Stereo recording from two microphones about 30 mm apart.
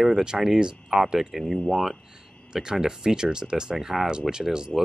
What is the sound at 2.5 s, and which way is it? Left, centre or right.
Speech, right.